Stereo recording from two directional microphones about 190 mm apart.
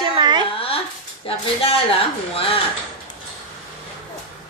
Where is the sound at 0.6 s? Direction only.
30° left (ahead or behind).